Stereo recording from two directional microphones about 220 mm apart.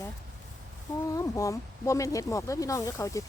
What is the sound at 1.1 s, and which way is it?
Speech, 15° left (ahead or behind).